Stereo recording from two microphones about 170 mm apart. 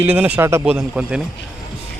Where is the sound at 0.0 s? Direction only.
10° right (ahead or behind).